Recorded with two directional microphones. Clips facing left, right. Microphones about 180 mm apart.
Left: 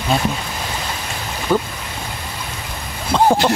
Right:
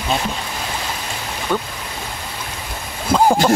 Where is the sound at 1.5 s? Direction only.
10° left (ahead or behind).